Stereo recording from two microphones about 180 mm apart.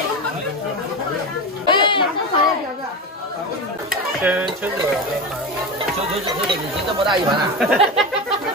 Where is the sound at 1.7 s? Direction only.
25° left (ahead or behind).